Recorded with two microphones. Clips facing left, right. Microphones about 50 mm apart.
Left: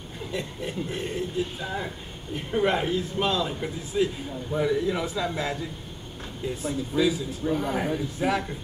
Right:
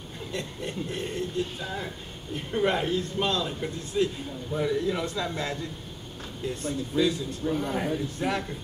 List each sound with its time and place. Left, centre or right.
0.3 s a man's voice: centre